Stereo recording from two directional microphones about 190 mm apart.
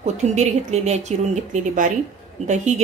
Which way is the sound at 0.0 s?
35° right (ahead or behind).